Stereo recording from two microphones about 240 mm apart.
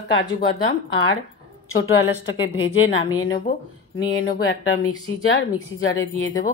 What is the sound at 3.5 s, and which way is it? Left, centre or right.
A woman's voice, left.